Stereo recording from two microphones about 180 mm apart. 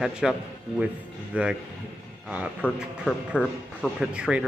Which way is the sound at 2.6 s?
10° left (ahead or behind).